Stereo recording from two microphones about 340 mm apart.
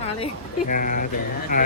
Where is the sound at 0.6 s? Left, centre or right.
Left.